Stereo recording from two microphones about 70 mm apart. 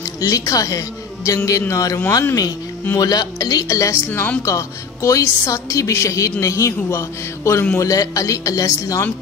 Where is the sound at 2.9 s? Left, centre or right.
Left.